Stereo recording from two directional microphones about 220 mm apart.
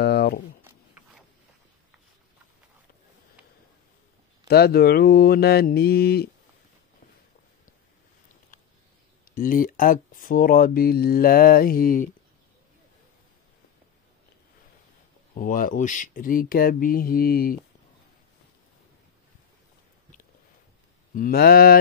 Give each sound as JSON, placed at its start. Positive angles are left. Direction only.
{"t": 0.0, "sound": "a sound", "side_deg": 45}
{"t": 4.5, "sound": "speech", "side_deg": 45}
{"t": 9.3, "sound": "speech", "side_deg": 40}
{"t": 15.3, "sound": "speech", "side_deg": 40}
{"t": 21.1, "sound": "speech", "side_deg": 40}